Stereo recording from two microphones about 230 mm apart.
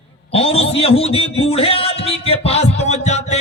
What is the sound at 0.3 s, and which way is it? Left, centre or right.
A man's voice, left.